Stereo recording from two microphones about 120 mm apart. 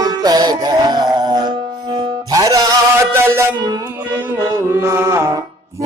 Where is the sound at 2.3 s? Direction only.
30° right (ahead or behind).